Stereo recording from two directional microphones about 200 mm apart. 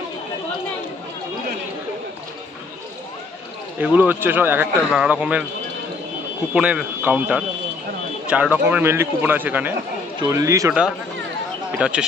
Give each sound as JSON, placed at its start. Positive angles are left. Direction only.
{"t": 3.7, "sound": "speech", "side_deg": -10}
{"t": 6.5, "sound": "speech", "side_deg": -5}
{"t": 11.8, "sound": "speech", "side_deg": -5}